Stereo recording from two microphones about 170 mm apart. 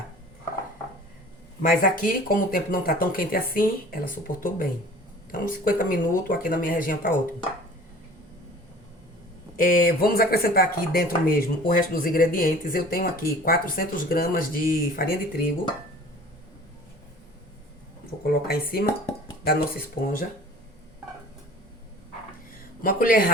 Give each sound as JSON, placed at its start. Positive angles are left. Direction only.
{"t": 1.6, "sound": "speech", "side_deg": 55}
{"t": 9.6, "sound": "speech", "side_deg": 55}
{"t": 18.2, "sound": "speech", "side_deg": 60}
{"t": 22.8, "sound": "speech", "side_deg": 55}